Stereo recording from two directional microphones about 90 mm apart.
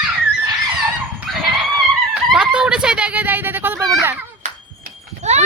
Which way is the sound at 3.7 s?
35° right (ahead or behind).